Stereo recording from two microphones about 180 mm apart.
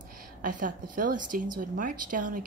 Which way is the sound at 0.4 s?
50° right (ahead or behind).